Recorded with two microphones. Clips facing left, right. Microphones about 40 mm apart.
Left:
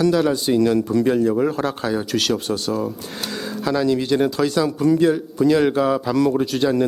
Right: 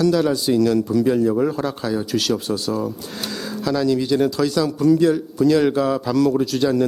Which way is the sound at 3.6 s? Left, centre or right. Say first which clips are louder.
Even; centre.